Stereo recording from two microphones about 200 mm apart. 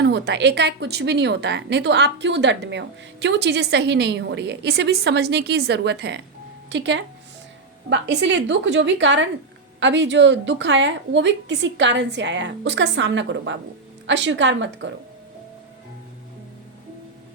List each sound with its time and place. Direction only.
0.0 s a woman's voice: 55° right (ahead or behind)